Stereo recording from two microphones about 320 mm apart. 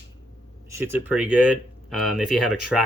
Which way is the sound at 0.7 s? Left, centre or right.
Centre.